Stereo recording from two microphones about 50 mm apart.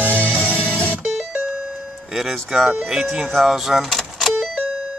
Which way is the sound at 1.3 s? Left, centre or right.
Right.